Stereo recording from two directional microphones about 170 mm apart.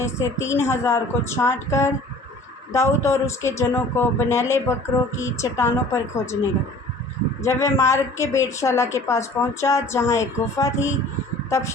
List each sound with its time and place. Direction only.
0.0 s a woman's voice: 15° left (ahead or behind)
2.7 s a woman's voice: 15° left (ahead or behind)
7.4 s a woman's voice: 15° left (ahead or behind)